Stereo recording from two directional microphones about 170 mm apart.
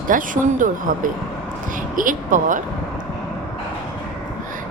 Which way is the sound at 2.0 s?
50° right (ahead or behind).